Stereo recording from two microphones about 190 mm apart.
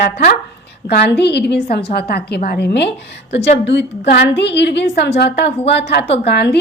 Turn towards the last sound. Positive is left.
turn(degrees=60)  # may be behind; listen again after turning